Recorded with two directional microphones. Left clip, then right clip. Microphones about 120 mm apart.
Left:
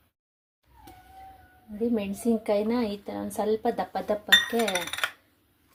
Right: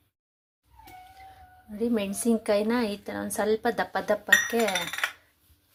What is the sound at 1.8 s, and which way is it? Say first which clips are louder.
A woman's voice: right 1 dB; 10° right (ahead or behind).